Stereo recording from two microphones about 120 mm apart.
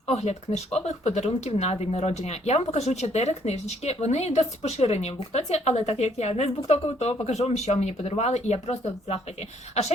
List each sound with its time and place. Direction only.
0.1 s speech: 65° left (ahead or behind)